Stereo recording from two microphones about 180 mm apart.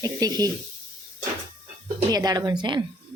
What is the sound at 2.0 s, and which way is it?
Speech, 20° right (ahead or behind).